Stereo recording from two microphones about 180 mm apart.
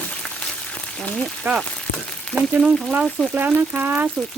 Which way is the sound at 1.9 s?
50° left (ahead or behind).